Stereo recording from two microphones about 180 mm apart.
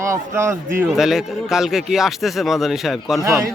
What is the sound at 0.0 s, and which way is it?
Speech, 15° right (ahead or behind).